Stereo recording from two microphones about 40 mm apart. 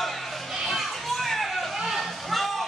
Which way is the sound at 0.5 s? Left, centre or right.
Centre.